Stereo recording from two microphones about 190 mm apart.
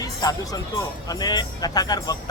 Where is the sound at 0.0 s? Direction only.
20° left (ahead or behind).